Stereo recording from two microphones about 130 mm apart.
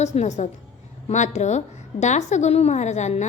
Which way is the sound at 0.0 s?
65° left (ahead or behind).